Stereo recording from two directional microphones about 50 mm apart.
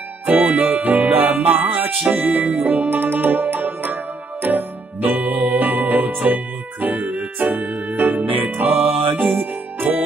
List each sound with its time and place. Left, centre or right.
0.6 s music: right